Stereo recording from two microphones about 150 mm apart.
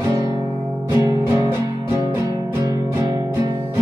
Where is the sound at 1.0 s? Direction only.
25° right (ahead or behind).